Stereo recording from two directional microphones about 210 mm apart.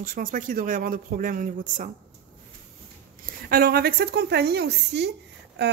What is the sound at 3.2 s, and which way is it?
A woman's voice, 45° right (ahead or behind).